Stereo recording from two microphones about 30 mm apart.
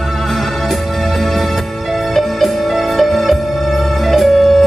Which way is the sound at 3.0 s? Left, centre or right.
Centre.